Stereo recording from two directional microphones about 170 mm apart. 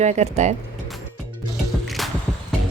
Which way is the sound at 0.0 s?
40° right (ahead or behind).